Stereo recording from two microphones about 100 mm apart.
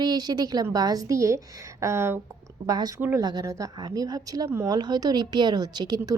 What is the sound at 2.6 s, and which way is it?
Speech, 40° right (ahead or behind).